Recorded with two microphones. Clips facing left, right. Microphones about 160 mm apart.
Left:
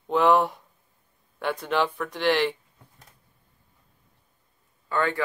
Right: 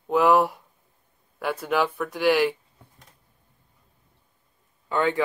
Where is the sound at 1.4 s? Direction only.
5° right (ahead or behind).